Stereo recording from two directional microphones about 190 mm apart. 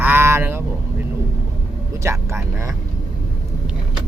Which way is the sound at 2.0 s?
15° right (ahead or behind).